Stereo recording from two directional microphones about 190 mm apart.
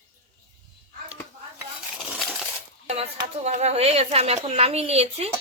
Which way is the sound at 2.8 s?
35° right (ahead or behind).